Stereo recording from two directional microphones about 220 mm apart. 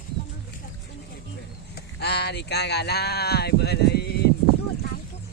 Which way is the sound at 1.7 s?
50° left (ahead or behind).